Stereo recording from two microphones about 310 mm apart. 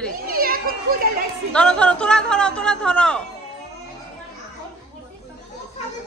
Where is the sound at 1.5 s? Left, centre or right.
Centre.